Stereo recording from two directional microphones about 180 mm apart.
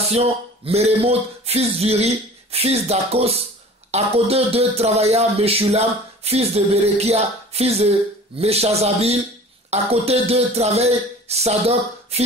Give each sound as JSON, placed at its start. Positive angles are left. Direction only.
{"t": 0.1, "sound": "speech", "side_deg": -35}